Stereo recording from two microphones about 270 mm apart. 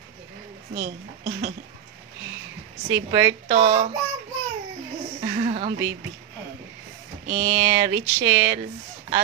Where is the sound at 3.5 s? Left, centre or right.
Right.